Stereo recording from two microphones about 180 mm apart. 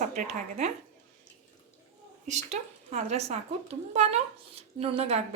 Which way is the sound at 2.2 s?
40° right (ahead or behind).